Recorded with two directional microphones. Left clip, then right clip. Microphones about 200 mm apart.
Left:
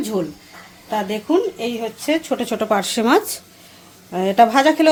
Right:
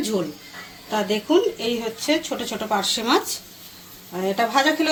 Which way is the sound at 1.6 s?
50° left (ahead or behind).